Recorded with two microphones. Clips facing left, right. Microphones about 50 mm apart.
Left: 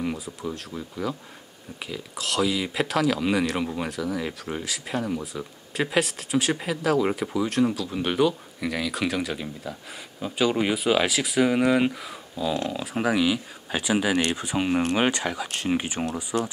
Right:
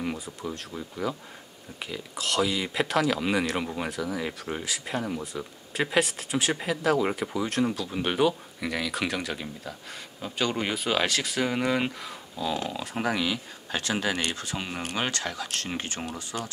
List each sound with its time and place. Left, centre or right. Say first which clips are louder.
0.0 s speech: left 3 dB; centre